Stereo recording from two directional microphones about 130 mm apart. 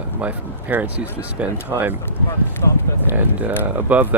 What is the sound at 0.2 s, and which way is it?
Speech, 10° right (ahead or behind).